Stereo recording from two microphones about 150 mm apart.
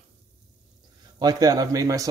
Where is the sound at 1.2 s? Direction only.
25° right (ahead or behind).